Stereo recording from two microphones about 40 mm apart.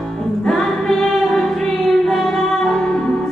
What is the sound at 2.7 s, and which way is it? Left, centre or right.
Music, centre.